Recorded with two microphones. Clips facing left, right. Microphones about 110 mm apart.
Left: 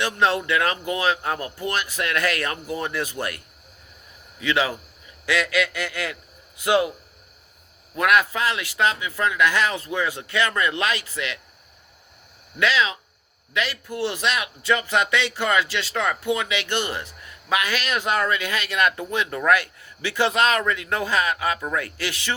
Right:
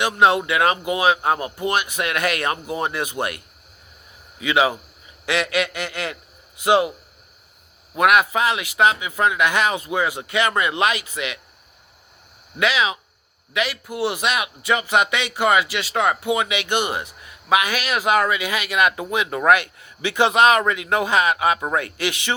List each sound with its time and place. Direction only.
0.0 s a man's voice: 15° right (ahead or behind)
7.9 s a man's voice: 15° right (ahead or behind)
12.5 s a man's voice: 15° right (ahead or behind)